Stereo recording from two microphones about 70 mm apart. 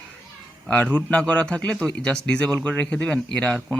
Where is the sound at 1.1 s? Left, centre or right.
Centre.